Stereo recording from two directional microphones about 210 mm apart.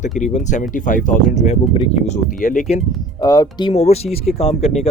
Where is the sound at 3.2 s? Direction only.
15° left (ahead or behind).